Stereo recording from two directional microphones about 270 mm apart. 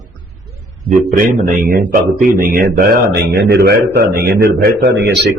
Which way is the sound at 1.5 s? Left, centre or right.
Right.